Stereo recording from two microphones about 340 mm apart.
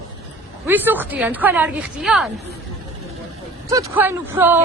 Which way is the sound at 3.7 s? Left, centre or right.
Centre.